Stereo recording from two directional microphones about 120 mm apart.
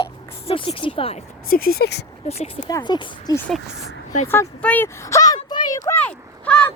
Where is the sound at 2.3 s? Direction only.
55° left (ahead or behind).